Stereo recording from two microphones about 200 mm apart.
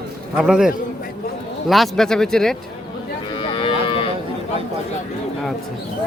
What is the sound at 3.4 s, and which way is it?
Cattle, 25° left (ahead or behind).